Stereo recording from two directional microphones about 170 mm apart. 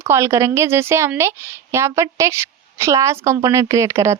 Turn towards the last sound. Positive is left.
turn(degrees=-15)  # may be behind; listen again after turning